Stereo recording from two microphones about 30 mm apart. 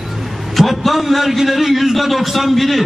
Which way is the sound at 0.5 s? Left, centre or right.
Centre.